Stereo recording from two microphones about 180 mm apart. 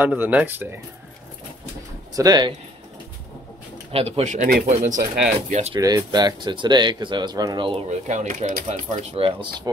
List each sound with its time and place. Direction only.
0.0 s speech: 10° right (ahead or behind)
2.1 s speech: 20° right (ahead or behind)
3.9 s speech: 35° right (ahead or behind)
5.8 s speech: 20° right (ahead or behind)
8.1 s speech: 40° right (ahead or behind)